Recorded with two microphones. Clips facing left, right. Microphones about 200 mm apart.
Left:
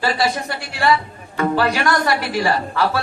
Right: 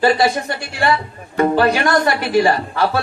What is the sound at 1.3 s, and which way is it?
Speech, 25° right (ahead or behind).